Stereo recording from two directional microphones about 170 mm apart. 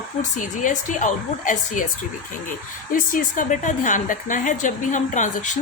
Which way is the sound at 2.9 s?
50° left (ahead or behind).